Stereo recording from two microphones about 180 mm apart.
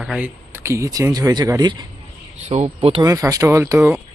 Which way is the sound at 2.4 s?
40° right (ahead or behind).